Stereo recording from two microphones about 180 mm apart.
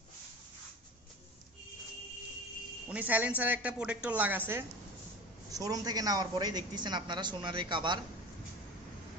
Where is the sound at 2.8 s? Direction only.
10° right (ahead or behind); by 7.9 s 25° right (ahead or behind).